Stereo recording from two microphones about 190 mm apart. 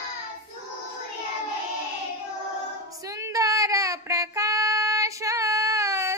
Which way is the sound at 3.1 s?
15° right (ahead or behind).